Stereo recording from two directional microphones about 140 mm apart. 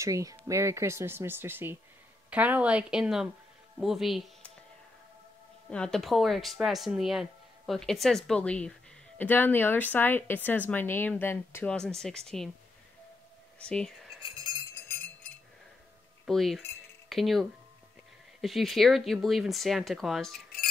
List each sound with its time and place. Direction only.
0.0 s a woman's voice: 25° right (ahead or behind); by 4.5 s centre (ahead or behind)
5.7 s speech: 5° left (ahead or behind)
11.7 s speech: 5° left (ahead or behind)
13.6 s speech: 5° left (ahead or behind)
14.9 s music: 15° left (ahead or behind)
16.3 s speech: centre (ahead or behind)